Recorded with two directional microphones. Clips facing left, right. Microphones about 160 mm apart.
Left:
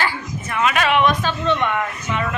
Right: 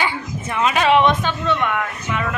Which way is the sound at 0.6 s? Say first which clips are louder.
Right 2 dB; 30° right (ahead or behind).